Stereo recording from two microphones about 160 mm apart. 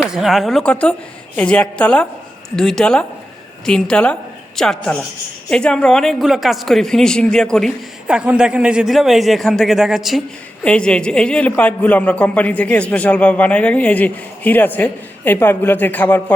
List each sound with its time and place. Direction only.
0.0 s a woman's voice: 5° right (ahead or behind)
8.0 s a man's voice: 10° right (ahead or behind); by 16.2 s 10° left (ahead or behind)